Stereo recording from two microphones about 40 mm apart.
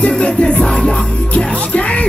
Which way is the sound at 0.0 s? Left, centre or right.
Left.